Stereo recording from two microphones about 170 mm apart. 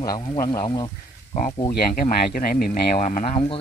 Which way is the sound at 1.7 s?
65° left (ahead or behind).